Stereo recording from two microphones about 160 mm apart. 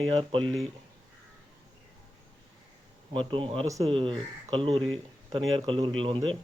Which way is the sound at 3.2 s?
30° right (ahead or behind).